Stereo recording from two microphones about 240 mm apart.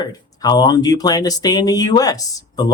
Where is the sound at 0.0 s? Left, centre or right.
Centre.